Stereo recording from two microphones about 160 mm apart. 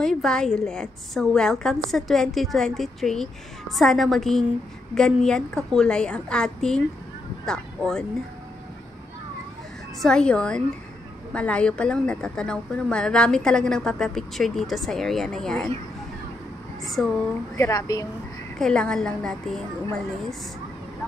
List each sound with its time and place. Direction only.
0.0 s a woman's voice: 5° left (ahead or behind)
10.0 s a woman's voice: 5° left (ahead or behind)
16.8 s a woman's voice: centre (ahead or behind)
17.6 s a woman's voice: 20° left (ahead or behind)
18.6 s a woman's voice: 5° left (ahead or behind)